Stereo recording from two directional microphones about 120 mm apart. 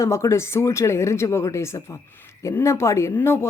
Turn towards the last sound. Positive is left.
turn(degrees=20)  # may be behind; listen again after turning